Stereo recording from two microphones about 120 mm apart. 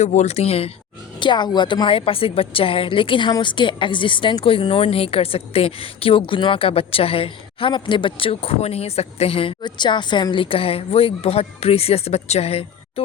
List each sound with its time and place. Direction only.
0.0 s speech: 80° left; by 0.7 s 55° left (ahead or behind)
1.2 s speech: 40° left (ahead or behind); by 12.6 s 60° left (ahead or behind)